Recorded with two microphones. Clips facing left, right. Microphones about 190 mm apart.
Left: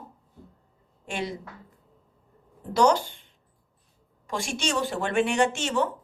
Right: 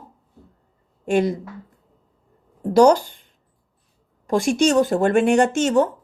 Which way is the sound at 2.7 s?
40° right (ahead or behind).